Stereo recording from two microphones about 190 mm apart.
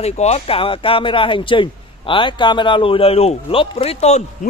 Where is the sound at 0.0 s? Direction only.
35° left (ahead or behind).